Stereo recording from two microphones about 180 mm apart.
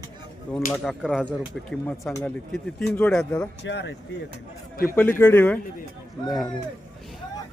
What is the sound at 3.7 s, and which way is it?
Speech, 75° left (ahead or behind).